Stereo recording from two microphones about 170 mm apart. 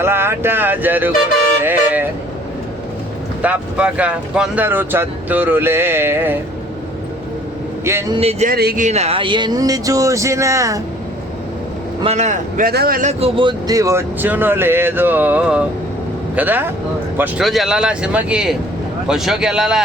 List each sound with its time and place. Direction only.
0.0 s speech: 15° right (ahead or behind)
1.6 s toot: 10° right (ahead or behind)
3.4 s speech: 5° right (ahead or behind)
7.9 s speech: 15° right (ahead or behind)
8.2 s speech: 35° right (ahead or behind)
8.4 s speech: 60° right (ahead or behind)
8.8 s speech: 40° right (ahead or behind); by 10.8 s 20° right (ahead or behind)
12.0 s a man's voice: 45° right (ahead or behind); by 13.0 s 65° right (ahead or behind)
13.0 s speech: 40° right (ahead or behind); by 19.8 s 5° right (ahead or behind)